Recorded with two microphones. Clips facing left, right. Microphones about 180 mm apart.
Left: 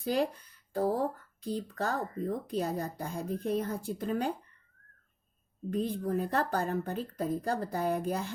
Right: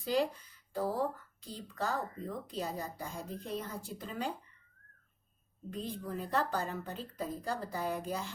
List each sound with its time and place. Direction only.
0.0 s a woman's voice: 55° left (ahead or behind)
5.7 s a woman's voice: 55° left (ahead or behind)